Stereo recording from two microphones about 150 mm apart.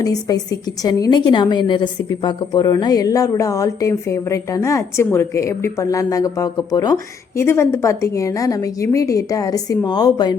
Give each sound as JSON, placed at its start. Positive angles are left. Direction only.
{"t": 0.0, "sound": "a woman's voice", "side_deg": 25}